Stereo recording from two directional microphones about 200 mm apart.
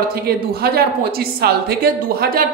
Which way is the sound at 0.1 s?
50° right (ahead or behind).